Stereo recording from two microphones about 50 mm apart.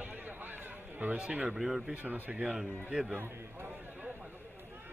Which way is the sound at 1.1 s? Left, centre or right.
Right.